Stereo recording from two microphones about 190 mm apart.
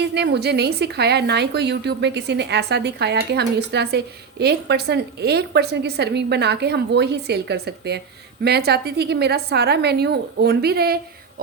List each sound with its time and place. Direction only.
0.0 s a woman's voice: 60° right (ahead or behind)